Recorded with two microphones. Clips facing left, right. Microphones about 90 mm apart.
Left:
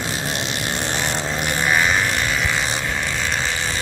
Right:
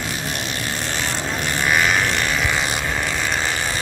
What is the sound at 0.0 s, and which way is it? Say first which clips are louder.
Vehicle: left 1 dB; 25° left (ahead or behind).